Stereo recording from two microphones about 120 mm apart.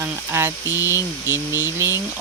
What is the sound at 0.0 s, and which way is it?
Speech, 20° right (ahead or behind).